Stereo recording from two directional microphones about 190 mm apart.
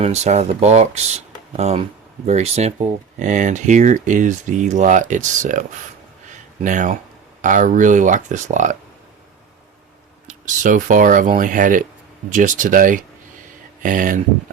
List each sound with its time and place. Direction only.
0.0 s speech: 35° right (ahead or behind)
10.2 s speech: 40° right (ahead or behind)